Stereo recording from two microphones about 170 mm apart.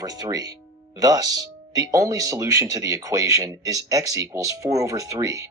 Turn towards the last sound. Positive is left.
turn(degrees=-20)  # may be behind; listen again after turning